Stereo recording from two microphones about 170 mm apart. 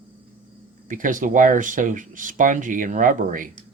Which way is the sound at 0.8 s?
50° right (ahead or behind).